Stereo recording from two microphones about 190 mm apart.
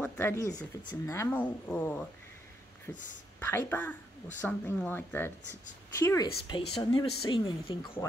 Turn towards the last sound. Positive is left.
turn(degrees=25)  # may be behind; listen again after turning